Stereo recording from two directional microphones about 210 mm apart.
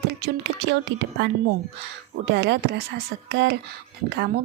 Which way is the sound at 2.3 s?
55° right (ahead or behind).